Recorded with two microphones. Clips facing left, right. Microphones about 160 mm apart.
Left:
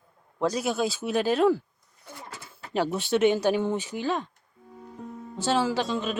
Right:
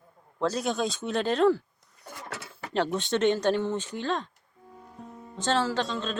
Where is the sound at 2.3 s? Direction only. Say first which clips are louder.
Right 5 dB; 75° right (ahead or behind).